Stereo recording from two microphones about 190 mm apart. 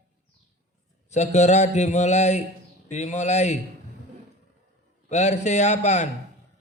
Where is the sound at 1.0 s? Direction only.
35° left (ahead or behind).